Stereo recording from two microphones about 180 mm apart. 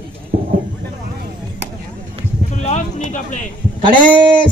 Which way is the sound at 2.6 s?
40° left (ahead or behind).